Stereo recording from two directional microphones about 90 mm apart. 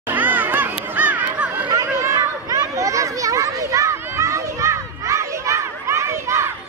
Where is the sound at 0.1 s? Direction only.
20° right (ahead or behind).